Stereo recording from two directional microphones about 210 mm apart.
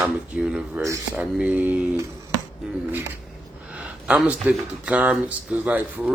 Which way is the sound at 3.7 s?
5° right (ahead or behind).